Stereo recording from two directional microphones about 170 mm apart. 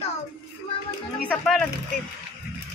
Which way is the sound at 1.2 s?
5° left (ahead or behind).